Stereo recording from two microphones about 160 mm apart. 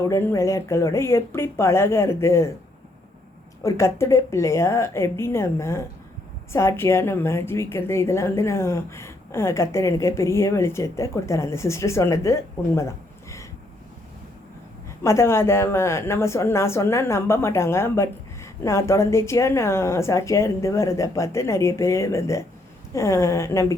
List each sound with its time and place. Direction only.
0.0 s a woman's voice: 15° left (ahead or behind)
3.6 s a woman's voice: 15° left (ahead or behind)
15.0 s a woman's voice: 15° left (ahead or behind)